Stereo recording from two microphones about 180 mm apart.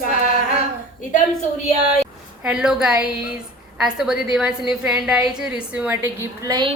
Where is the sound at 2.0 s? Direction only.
5° right (ahead or behind).